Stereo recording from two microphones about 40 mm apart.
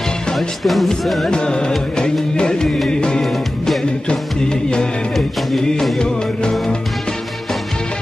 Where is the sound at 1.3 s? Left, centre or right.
Left.